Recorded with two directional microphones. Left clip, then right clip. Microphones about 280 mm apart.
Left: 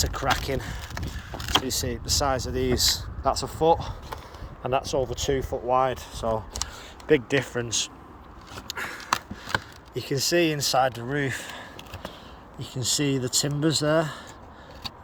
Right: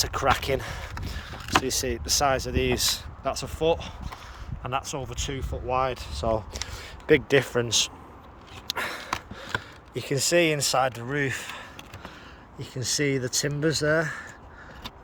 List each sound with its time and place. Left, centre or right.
0.0 s vehicle: centre
1.6 s speech: centre
4.6 s speech: centre
6.2 s speech: centre
8.6 s a sound: right
9.9 s speech: centre
12.5 s speech: right
13.5 s speech: centre